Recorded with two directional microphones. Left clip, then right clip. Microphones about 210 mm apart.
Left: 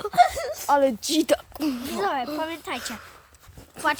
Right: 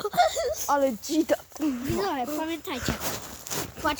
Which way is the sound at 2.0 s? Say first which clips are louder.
Left 4 dB; 25° left (ahead or behind).